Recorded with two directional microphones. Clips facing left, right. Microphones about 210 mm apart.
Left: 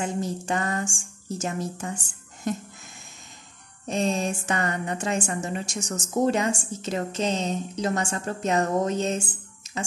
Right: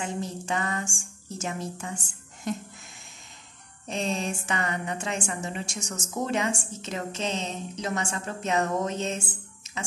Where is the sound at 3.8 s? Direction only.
45° left (ahead or behind).